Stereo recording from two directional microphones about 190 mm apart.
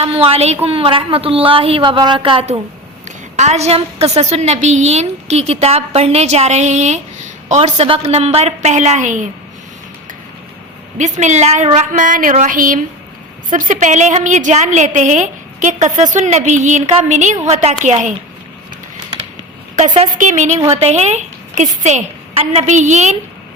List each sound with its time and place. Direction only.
0.0 s a woman's voice: 30° right (ahead or behind)
10.9 s a woman's voice: 40° right (ahead or behind)
20.1 s a woman's voice: 40° right (ahead or behind)